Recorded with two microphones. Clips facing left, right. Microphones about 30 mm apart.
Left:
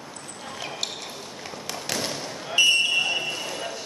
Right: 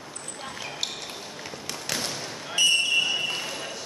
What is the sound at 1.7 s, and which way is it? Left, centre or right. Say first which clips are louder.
Basketball bounce: left 2 dB; centre.